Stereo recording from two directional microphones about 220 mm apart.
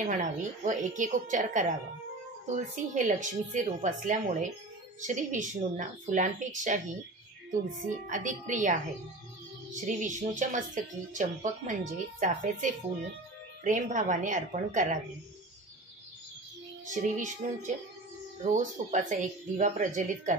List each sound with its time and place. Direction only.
0.0 s speech: 35° right (ahead or behind)
7.8 s speech: 35° right (ahead or behind)
9.8 s speech: 35° right (ahead or behind)
16.9 s speech: 35° right (ahead or behind)